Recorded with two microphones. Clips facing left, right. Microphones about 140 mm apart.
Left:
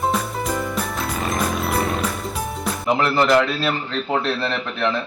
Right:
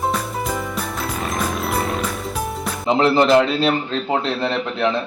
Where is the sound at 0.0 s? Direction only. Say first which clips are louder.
Even; centre (ahead or behind).